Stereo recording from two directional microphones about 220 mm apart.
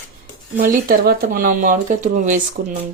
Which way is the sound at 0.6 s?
40° right (ahead or behind).